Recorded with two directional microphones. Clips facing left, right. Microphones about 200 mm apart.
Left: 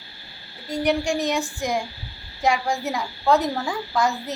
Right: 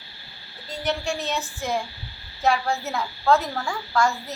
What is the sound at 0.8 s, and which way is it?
A woman's voice, 15° left (ahead or behind).